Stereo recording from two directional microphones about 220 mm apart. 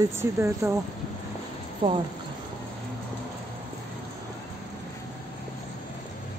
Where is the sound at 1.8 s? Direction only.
20° right (ahead or behind).